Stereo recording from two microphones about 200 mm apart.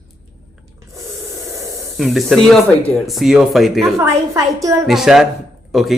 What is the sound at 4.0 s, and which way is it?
Speech, 15° right (ahead or behind).